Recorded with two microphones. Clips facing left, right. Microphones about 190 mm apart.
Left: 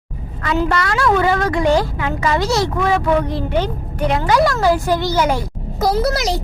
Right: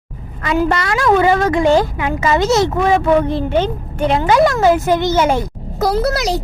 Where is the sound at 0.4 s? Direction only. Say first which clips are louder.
Right 2 dB; 15° right (ahead or behind).